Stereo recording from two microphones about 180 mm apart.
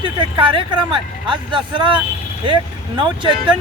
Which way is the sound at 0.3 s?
25° right (ahead or behind).